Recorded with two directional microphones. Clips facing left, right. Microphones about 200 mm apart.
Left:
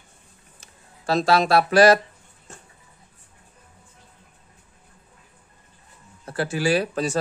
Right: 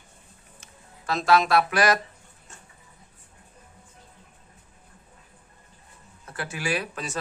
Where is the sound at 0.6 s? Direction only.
30° left (ahead or behind).